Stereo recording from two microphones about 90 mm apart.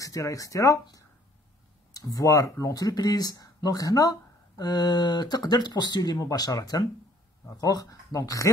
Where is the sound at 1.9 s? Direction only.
35° left (ahead or behind).